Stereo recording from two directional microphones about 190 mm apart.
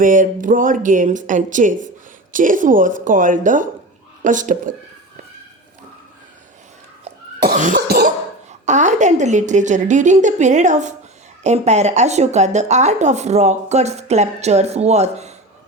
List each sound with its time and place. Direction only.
0.0 s speech: 45° right (ahead or behind)
7.4 s cough: 45° right (ahead or behind)
8.6 s speech: 40° right (ahead or behind)